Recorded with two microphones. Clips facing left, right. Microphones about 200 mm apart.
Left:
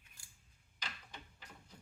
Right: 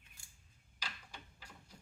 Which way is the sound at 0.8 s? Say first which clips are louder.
Even; 10° right (ahead or behind).